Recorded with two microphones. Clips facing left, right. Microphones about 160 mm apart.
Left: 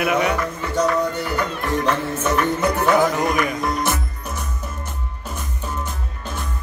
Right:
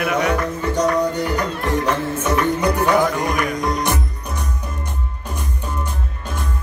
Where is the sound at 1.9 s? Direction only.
10° right (ahead or behind).